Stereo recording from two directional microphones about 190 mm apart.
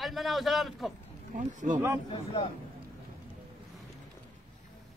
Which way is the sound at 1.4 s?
40° right (ahead or behind).